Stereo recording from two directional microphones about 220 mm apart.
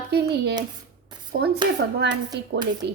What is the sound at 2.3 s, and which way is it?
Speech, 15° right (ahead or behind).